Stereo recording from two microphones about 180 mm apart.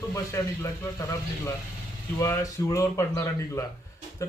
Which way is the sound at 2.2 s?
15° left (ahead or behind).